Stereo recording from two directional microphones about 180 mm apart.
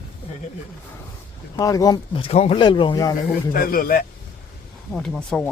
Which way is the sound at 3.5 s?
50° left (ahead or behind).